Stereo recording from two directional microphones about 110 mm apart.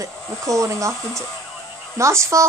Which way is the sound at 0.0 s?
30° right (ahead or behind).